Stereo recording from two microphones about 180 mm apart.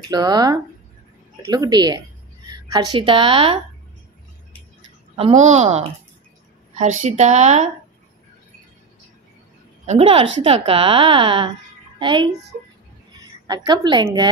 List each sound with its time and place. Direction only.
0.1 s a woman's voice: 20° right (ahead or behind)
5.1 s a woman's voice: 35° right (ahead or behind)
9.8 s a woman's voice: 35° right (ahead or behind)
13.1 s a sound: 20° right (ahead or behind)
13.7 s a woman's voice: 25° right (ahead or behind)